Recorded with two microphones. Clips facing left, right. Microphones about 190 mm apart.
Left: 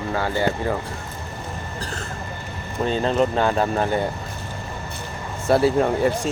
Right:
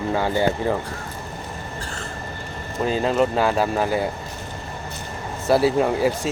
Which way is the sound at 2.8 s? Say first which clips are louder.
Even; 5° right (ahead or behind).